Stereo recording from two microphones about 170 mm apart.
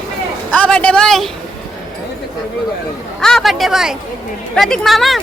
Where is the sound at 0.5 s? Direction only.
10° left (ahead or behind).